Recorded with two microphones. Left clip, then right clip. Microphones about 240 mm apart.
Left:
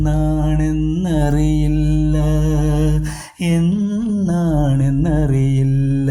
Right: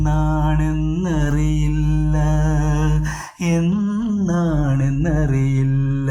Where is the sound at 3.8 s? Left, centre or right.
Left.